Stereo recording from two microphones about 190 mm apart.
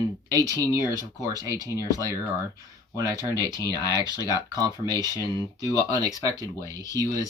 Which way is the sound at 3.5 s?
20° left (ahead or behind).